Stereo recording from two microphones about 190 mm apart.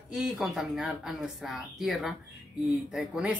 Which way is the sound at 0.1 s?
5° right (ahead or behind).